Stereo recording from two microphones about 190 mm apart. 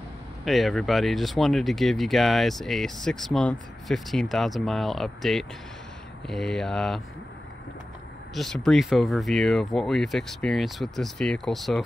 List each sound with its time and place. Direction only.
0.5 s speech: centre (ahead or behind)
8.4 s speech: 5° left (ahead or behind)